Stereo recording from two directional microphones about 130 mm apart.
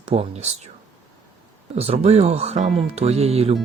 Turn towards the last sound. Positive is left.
turn(degrees=-55)  # may be behind; listen again after turning